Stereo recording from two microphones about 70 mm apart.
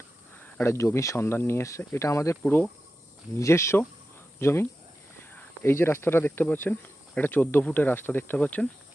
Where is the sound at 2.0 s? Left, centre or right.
Left.